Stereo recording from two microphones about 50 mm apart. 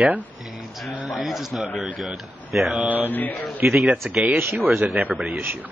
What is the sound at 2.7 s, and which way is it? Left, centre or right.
Speech, right.